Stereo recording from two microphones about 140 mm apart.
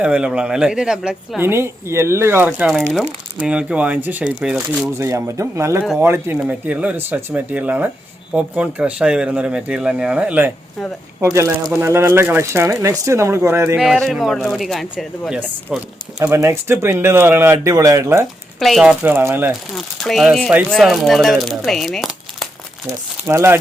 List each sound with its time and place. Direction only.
0.0 s speech: 10° right (ahead or behind)
1.4 s speech: 15° right (ahead or behind)
2.6 s speech: centre (ahead or behind)
4.9 s speech: 20° right (ahead or behind)
13.7 s speech: centre (ahead or behind)
16.2 s speech: 20° right (ahead or behind)
18.6 s speech: centre (ahead or behind)
19.0 s speech: 15° right (ahead or behind)
19.7 s speech: centre (ahead or behind)
23.2 s speech: 15° right (ahead or behind)